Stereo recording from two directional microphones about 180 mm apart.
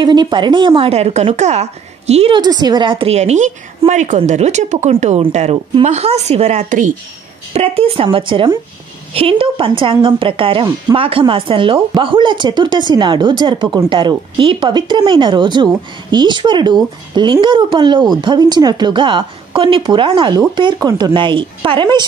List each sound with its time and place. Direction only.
0.0 s a woman's voice: 25° right (ahead or behind)